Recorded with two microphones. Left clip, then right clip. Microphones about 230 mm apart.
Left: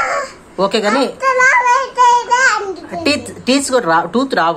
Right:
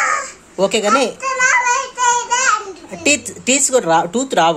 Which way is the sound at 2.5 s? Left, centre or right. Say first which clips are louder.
Even; right.